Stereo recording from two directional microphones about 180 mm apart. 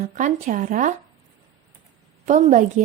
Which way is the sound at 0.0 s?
45° right (ahead or behind).